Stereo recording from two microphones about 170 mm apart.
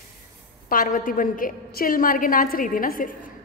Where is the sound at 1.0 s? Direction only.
55° left (ahead or behind).